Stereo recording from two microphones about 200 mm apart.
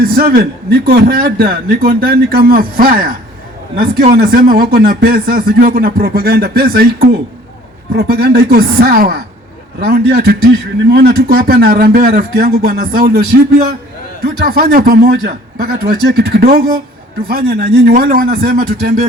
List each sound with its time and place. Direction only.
0.0 s a man's voice: 50° right (ahead or behind)
4.1 s a man's voice: 50° right (ahead or behind)